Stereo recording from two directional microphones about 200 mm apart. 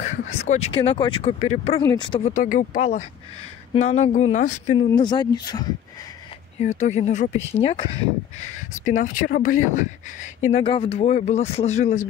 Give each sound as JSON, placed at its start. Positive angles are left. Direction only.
{"t": 0.0, "sound": "speech", "side_deg": 35}
{"t": 1.8, "sound": "speech", "side_deg": 20}
{"t": 2.3, "sound": "speech", "side_deg": 40}
{"t": 4.7, "sound": "speech", "side_deg": 20}
{"t": 6.6, "sound": "speech", "side_deg": 35}